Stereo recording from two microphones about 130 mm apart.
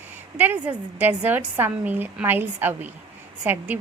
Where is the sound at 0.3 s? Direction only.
10° right (ahead or behind).